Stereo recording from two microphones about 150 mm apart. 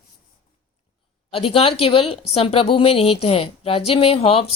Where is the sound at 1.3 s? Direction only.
40° left (ahead or behind).